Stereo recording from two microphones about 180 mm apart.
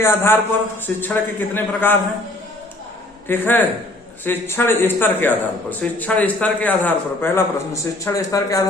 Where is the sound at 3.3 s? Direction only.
10° left (ahead or behind).